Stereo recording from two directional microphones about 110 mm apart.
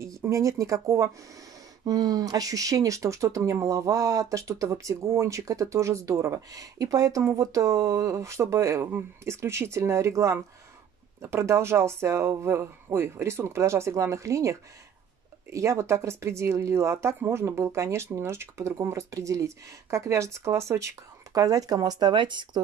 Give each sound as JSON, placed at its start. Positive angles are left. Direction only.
{"t": 0.2, "sound": "speech", "side_deg": -30}